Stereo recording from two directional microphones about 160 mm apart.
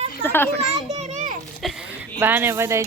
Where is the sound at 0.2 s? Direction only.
15° left (ahead or behind).